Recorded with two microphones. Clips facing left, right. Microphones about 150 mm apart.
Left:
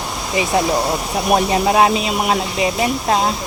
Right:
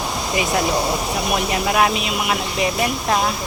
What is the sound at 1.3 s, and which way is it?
A woman's voice, 30° left (ahead or behind).